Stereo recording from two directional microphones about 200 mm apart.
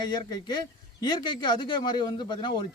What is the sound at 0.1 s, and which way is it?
Speech, 20° left (ahead or behind).